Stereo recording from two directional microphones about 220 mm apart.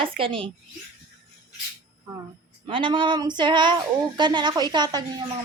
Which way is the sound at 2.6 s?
25° right (ahead or behind).